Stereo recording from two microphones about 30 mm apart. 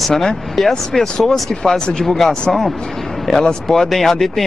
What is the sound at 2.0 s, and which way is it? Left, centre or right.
Speech, centre.